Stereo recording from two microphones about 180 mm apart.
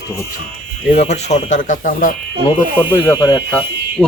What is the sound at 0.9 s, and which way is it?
Speech, 40° left (ahead or behind).